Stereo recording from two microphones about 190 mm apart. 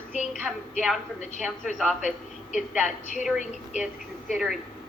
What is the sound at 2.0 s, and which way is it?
A man's voice, 40° left (ahead or behind).